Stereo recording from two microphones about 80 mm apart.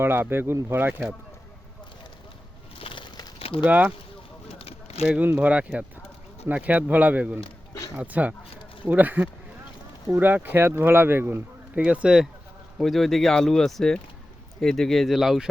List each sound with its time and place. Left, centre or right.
0.0 s speech: right
2.9 s bird: left
3.6 s speech: centre
5.0 s speech: centre
11.7 s speech: centre
12.8 s speech: centre